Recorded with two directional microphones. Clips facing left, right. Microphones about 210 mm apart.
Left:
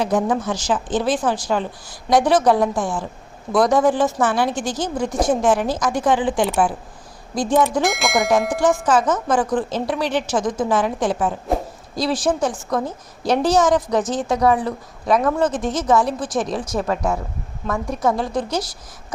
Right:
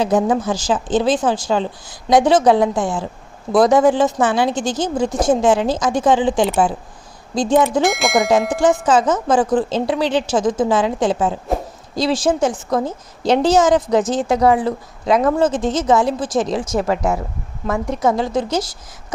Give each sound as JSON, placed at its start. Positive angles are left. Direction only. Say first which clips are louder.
{"t": 0.0, "sound": "a woman's voice", "louder": "right 3 dB", "side_deg": -30}
{"t": 7.8, "sound": "speech", "louder": "right 3 dB", "side_deg": 0}
{"t": 8.9, "sound": "a woman's voice", "louder": "right 3 dB", "side_deg": -25}